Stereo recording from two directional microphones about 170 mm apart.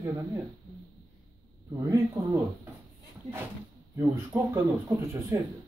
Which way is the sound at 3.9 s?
15° right (ahead or behind).